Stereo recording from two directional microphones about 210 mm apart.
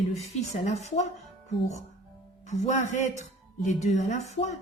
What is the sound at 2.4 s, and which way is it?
Speech, 35° left (ahead or behind).